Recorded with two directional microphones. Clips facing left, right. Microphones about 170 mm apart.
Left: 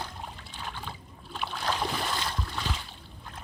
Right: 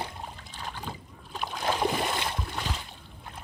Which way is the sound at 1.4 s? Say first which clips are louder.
Right 2 dB; 15° right (ahead or behind).